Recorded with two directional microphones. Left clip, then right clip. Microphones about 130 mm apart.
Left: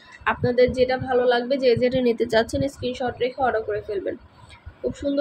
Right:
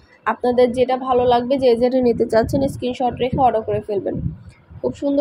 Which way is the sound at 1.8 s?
20° right (ahead or behind).